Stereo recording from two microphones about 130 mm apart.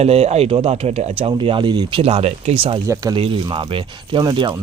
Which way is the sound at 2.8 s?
30° right (ahead or behind).